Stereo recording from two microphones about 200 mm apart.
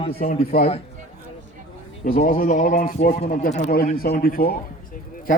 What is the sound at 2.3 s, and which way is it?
A man's voice, 45° left (ahead or behind).